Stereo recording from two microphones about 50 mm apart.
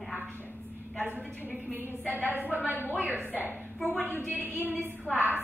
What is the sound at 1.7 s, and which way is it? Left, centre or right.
Speech, right.